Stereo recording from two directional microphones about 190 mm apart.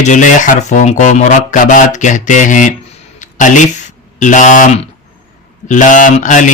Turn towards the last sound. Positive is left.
turn(degrees=40)  # may be behind; listen again after turning